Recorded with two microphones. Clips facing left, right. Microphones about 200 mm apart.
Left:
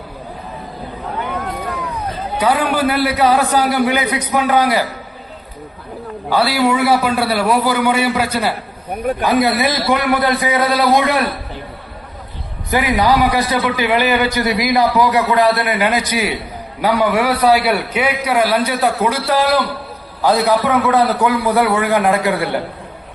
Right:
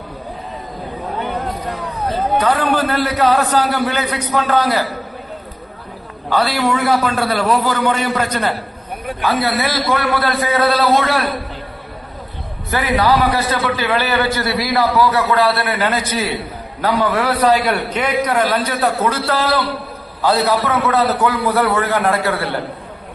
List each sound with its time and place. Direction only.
2.4 s a man's voice: 10° left (ahead or behind)
6.3 s a man's voice: 10° left (ahead or behind)
12.7 s a man's voice: 15° left (ahead or behind)